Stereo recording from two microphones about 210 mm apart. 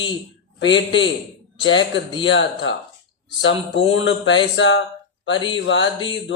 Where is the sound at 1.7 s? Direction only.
65° left (ahead or behind).